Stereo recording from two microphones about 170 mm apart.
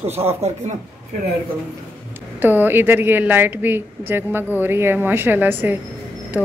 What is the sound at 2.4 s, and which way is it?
A woman's voice, 10° right (ahead or behind).